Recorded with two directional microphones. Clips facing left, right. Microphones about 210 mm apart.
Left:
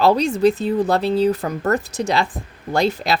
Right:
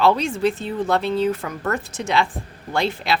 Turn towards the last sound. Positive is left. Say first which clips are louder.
# left 3 dB
turn(degrees=40)  # may be behind; listen again after turning